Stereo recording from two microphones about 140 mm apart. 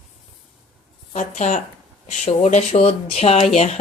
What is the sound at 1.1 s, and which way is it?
Speech, 55° left (ahead or behind).